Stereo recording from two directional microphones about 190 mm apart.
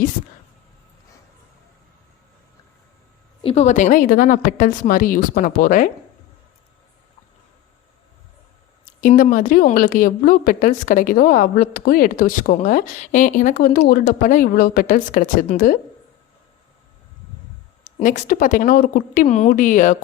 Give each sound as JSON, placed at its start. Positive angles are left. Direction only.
{"t": 3.4, "sound": "a woman's voice", "side_deg": 35}
{"t": 9.0, "sound": "a woman's voice", "side_deg": 45}
{"t": 17.8, "sound": "a woman's voice", "side_deg": 45}